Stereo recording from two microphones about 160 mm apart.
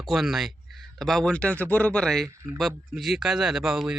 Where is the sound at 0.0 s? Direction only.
Centre (ahead or behind).